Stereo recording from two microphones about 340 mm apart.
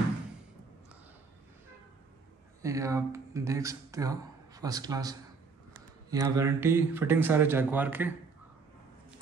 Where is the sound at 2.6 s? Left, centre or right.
Centre.